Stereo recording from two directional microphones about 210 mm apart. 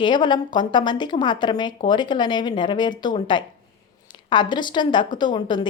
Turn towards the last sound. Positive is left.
turn(degrees=20)  # may be behind; listen again after turning